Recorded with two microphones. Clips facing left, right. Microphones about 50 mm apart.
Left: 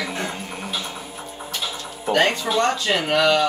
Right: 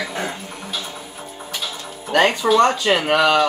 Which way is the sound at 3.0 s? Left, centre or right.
Right.